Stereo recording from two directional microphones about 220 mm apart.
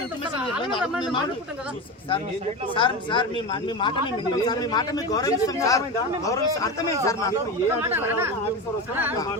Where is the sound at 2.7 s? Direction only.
20° left (ahead or behind).